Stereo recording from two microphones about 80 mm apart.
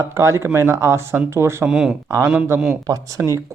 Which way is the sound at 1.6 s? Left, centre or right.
Centre.